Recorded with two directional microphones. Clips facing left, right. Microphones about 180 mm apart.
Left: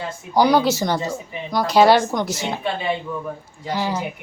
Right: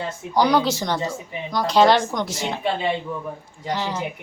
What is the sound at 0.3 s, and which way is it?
A woman's voice, 5° left (ahead or behind).